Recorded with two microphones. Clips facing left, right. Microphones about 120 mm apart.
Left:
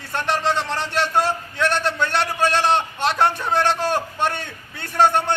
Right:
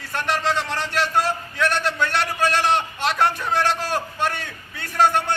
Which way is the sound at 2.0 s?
25° left (ahead or behind).